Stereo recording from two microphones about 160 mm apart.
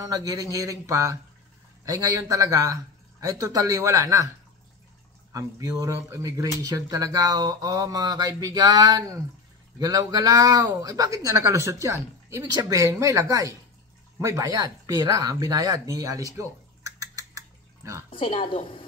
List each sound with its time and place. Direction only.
0.0 s speech: 20° right (ahead or behind)
5.3 s speech: 20° right (ahead or behind)
18.1 s a woman's voice: 35° left (ahead or behind)